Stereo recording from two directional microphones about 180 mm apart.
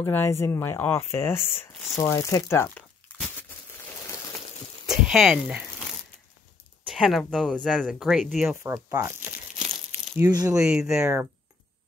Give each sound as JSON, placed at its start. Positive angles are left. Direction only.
{"t": 0.0, "sound": "speech", "side_deg": 15}
{"t": 4.8, "sound": "speech", "side_deg": 0}
{"t": 6.9, "sound": "speech", "side_deg": 0}
{"t": 8.6, "sound": "speech", "side_deg": -20}
{"t": 10.1, "sound": "speech", "side_deg": -20}
{"t": 10.6, "sound": "speech", "side_deg": -5}